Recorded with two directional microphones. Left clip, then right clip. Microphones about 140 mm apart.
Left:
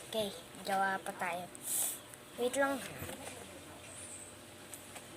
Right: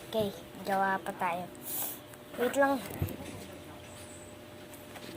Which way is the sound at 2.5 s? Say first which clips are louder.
Right 7 dB; 20° left (ahead or behind).